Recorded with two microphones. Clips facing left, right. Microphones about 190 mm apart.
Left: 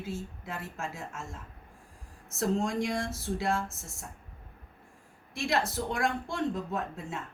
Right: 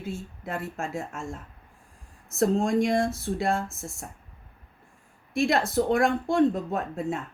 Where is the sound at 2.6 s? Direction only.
50° right (ahead or behind).